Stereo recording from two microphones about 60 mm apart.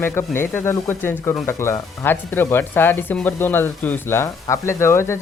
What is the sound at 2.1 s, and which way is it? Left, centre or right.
Speech, left.